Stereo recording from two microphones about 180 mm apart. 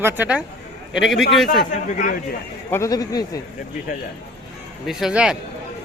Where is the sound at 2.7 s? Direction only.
20° left (ahead or behind).